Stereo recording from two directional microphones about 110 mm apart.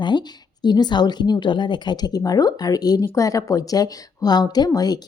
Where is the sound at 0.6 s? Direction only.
40° left (ahead or behind).